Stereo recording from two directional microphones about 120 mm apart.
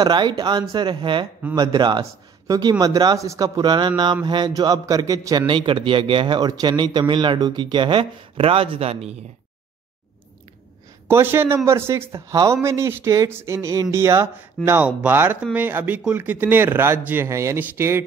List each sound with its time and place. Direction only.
0.0 s a man's voice: 40° right (ahead or behind)
5.5 s speech: 45° right (ahead or behind)
11.1 s speech: 20° right (ahead or behind)